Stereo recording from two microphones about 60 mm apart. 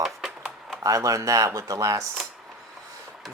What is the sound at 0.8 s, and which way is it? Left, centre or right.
Speech, right.